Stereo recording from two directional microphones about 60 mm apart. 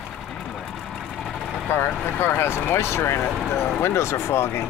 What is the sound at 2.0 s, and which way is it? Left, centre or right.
Speech, left.